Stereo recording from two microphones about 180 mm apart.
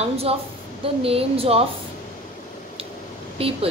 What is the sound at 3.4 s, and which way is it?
Speech, 30° right (ahead or behind).